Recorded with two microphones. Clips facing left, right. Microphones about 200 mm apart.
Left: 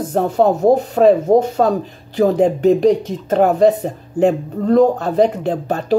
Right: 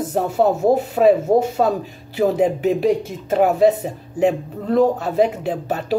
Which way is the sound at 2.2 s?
5° right (ahead or behind).